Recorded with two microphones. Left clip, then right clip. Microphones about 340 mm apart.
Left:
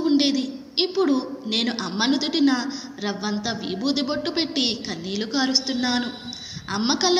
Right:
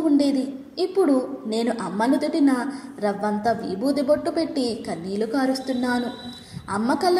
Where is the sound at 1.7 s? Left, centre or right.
Right.